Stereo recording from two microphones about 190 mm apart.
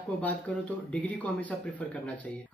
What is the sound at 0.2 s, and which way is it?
Speech, 10° left (ahead or behind).